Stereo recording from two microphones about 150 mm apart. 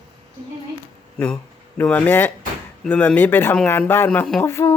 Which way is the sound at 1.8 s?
10° left (ahead or behind).